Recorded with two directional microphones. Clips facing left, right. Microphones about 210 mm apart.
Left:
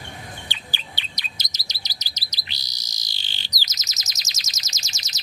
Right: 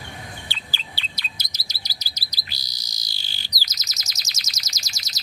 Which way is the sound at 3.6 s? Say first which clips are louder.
Even; 20° left (ahead or behind).